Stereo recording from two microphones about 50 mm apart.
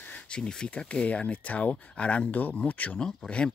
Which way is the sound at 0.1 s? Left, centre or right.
Centre.